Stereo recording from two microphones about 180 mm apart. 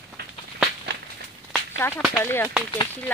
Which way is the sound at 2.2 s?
15° left (ahead or behind).